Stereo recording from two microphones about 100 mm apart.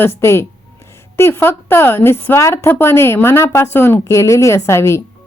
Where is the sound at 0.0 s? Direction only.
25° left (ahead or behind).